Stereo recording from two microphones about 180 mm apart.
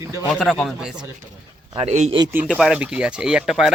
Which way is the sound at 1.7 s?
40° right (ahead or behind).